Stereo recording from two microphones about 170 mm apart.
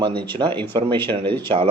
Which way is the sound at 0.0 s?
30° right (ahead or behind).